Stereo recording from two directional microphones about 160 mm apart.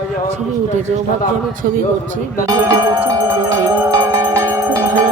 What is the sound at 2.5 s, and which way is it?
Speech, 20° right (ahead or behind).